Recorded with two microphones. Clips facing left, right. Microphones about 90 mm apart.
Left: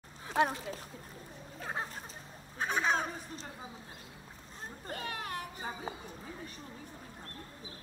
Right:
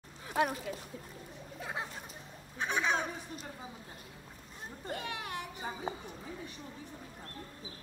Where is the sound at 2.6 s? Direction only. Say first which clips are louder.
Left 1 dB; 40° left (ahead or behind).